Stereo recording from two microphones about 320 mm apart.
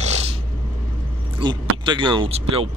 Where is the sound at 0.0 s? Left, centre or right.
Right.